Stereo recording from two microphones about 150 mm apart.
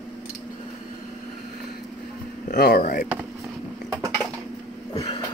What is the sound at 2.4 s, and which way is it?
Speech, 90° left.